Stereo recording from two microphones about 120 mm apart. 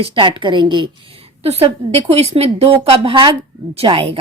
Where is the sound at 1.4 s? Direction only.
55° right (ahead or behind).